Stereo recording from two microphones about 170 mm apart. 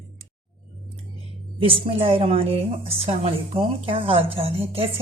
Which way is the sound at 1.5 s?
35° right (ahead or behind).